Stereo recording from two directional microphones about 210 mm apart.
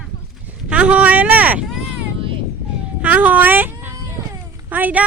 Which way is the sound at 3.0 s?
5° right (ahead or behind).